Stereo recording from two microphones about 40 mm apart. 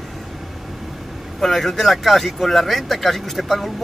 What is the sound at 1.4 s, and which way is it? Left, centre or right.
Speech, centre.